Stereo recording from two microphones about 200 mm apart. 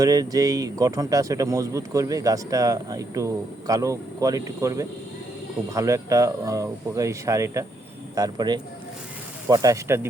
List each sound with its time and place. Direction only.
0.0 s a man's voice: 20° right (ahead or behind)